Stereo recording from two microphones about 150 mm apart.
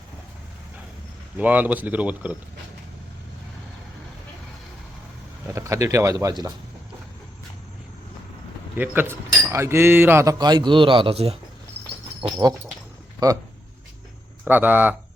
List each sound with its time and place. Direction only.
1.4 s speech: 10° right (ahead or behind)
5.5 s speech: 20° right (ahead or behind)
8.7 s speech: 10° right (ahead or behind); by 11.3 s 40° right (ahead or behind)
12.4 s speech: 30° right (ahead or behind)
14.4 s speech: 10° right (ahead or behind)